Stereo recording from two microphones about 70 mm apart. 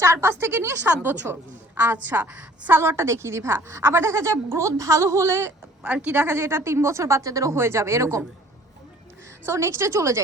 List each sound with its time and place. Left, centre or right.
0.0 s a woman's voice: right
5.8 s a woman's voice: centre
6.2 s speech: right
7.5 s speech: right
9.5 s a woman's voice: right